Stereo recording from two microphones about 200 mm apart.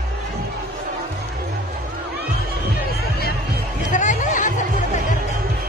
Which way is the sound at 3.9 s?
40° left (ahead or behind).